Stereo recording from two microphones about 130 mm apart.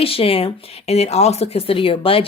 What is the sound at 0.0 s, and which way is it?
Speech, 45° left (ahead or behind).